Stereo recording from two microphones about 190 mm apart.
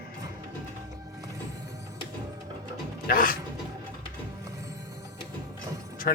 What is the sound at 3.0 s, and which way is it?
Music, 50° left (ahead or behind).